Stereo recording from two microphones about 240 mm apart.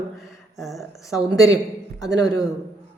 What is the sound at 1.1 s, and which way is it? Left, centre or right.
A woman's voice, centre.